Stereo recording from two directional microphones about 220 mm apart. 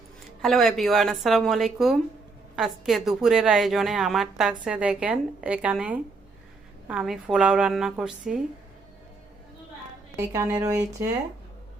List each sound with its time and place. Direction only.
0.4 s a woman's voice: centre (ahead or behind)
10.2 s speech: 15° right (ahead or behind)